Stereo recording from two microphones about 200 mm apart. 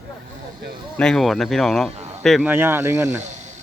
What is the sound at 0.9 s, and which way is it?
Speech, 5° left (ahead or behind).